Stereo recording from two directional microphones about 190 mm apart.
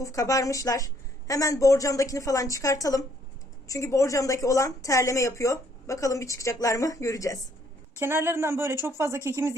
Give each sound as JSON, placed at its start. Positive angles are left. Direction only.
{"t": 0.0, "sound": "a woman's voice", "side_deg": 15}
{"t": 7.9, "sound": "speech", "side_deg": -10}